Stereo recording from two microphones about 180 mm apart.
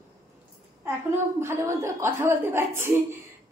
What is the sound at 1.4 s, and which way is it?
A woman's voice, 15° right (ahead or behind).